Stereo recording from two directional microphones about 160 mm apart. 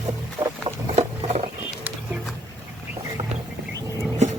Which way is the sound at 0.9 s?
40° right (ahead or behind).